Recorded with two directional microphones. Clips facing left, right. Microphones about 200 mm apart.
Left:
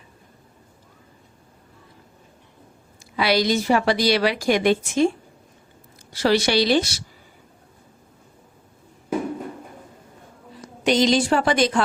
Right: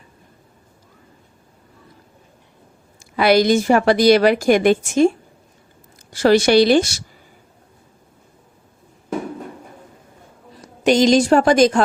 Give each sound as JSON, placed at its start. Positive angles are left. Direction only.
{"t": 3.0, "sound": "a woman's voice", "side_deg": -50}
{"t": 10.8, "sound": "a woman's voice", "side_deg": -45}